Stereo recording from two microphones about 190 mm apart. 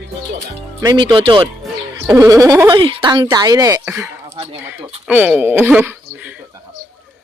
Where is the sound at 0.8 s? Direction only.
25° right (ahead or behind).